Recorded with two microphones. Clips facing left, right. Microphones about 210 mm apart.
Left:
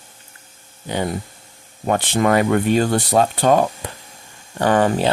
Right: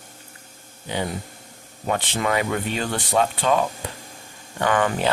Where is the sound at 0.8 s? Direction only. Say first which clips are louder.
Left 4 dB; 45° left (ahead or behind).